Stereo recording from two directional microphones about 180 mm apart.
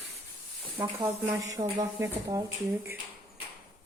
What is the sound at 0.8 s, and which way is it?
Speech, 10° right (ahead or behind).